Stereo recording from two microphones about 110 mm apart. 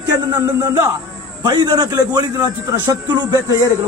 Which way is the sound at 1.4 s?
35° right (ahead or behind).